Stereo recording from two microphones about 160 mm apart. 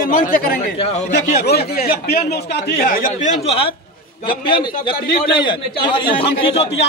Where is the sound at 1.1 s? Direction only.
90° left.